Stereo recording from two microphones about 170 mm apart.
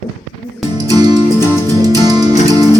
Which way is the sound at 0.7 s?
20° right (ahead or behind).